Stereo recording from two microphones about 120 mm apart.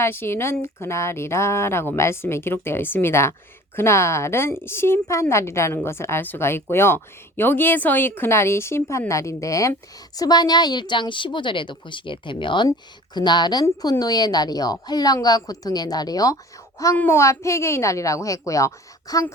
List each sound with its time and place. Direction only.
0.0 s a woman's voice: 20° left (ahead or behind)